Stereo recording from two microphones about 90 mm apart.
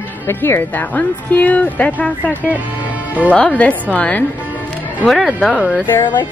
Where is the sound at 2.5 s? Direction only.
15° right (ahead or behind).